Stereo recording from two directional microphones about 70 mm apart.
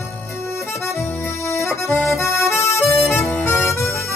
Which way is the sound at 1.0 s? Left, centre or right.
Left.